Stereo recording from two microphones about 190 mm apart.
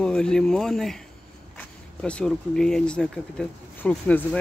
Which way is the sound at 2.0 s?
5° left (ahead or behind).